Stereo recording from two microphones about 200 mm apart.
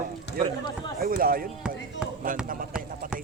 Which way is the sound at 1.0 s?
45° right (ahead or behind).